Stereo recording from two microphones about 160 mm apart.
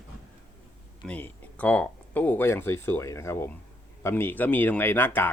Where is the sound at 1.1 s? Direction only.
10° left (ahead or behind).